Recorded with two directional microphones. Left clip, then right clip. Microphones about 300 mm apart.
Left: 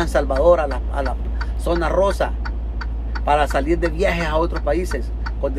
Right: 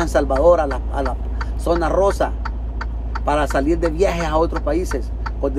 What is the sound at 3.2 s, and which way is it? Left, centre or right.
Speech, centre.